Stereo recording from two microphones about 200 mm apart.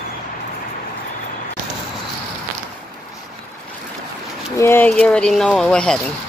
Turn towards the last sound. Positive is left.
turn(degrees=5)  # may be behind; listen again after turning